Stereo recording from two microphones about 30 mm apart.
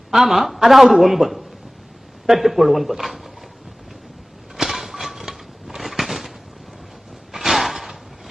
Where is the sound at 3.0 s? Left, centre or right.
Centre.